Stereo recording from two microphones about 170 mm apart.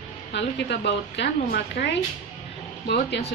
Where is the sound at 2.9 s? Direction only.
80° left.